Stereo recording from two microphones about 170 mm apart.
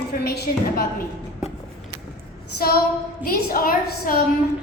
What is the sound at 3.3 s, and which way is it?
Speech, 60° left (ahead or behind).